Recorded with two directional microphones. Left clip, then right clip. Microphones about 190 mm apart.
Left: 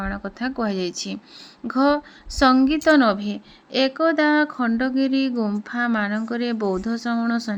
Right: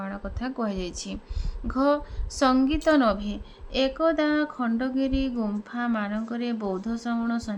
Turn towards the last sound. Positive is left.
turn(degrees=25)  # may be behind; listen again after turning